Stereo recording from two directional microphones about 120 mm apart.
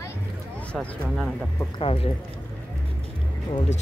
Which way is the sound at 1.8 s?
50° left (ahead or behind).